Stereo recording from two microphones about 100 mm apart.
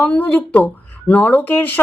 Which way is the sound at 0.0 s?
15° left (ahead or behind).